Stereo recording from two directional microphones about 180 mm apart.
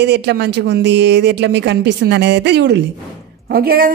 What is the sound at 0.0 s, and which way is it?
A woman's voice, 70° right (ahead or behind).